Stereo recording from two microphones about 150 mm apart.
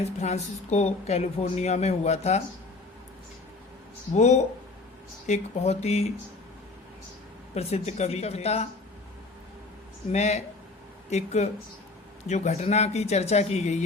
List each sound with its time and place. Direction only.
0.0 s a woman's voice: 45° left (ahead or behind)
4.1 s a woman's voice: 50° left (ahead or behind)
7.5 s a woman's voice: 45° left (ahead or behind)
10.1 s a woman's voice: 45° left (ahead or behind)